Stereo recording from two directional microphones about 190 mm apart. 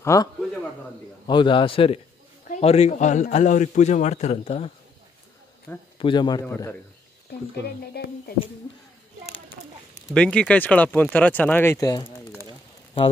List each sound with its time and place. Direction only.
0.0 s a man's voice: 15° left (ahead or behind)
5.9 s a man's voice: 25° left (ahead or behind)
6.4 s speech: 10° left (ahead or behind)
8.0 s speech: 55° left (ahead or behind)
10.1 s speech: 5° left (ahead or behind)